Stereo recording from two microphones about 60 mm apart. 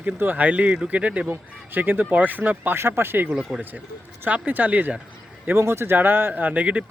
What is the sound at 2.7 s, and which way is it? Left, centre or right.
Speech, right.